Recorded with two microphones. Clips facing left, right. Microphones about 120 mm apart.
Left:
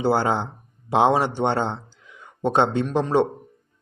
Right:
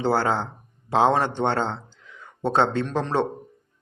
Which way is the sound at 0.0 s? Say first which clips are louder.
Left 1 dB; 15° left (ahead or behind).